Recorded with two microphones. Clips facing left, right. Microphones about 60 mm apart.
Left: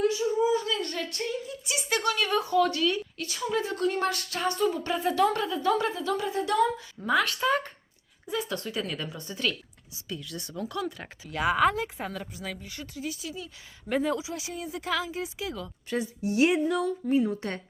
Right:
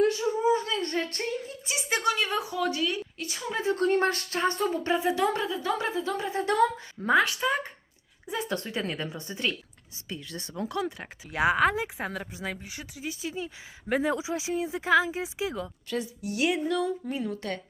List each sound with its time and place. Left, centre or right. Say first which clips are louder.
0.5 s a sound: right 1 dB; right
1.7 s a woman's voice: right 1 dB; right
7.3 s speech: left 2 dB; centre
8.3 s a woman's voice: even; right
13.0 s a woman's voice: right 2 dB; right
13.9 s speech: right 1 dB; centre
14.2 s a woman's voice: right 6 dB; right
15.9 s a woman's voice: left 4 dB; left